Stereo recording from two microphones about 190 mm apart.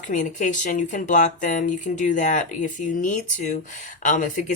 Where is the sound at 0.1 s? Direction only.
40° left (ahead or behind).